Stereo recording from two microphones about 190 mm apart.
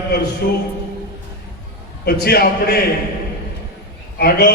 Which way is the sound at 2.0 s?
55° left (ahead or behind).